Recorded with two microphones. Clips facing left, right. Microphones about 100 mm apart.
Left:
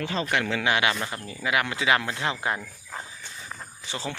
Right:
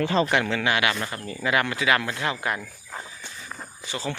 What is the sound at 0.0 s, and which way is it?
Speech, 45° right (ahead or behind).